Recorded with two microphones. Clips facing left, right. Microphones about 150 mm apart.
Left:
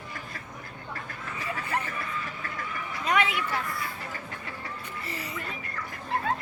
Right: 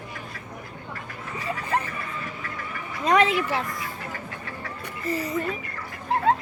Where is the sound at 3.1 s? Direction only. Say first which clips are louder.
Right 6 dB; 40° right (ahead or behind).